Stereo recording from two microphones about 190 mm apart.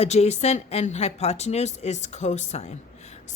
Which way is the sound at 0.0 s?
35° left (ahead or behind).